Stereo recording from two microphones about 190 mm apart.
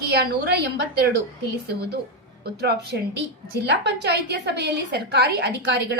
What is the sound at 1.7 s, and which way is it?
A woman's voice, 55° right (ahead or behind).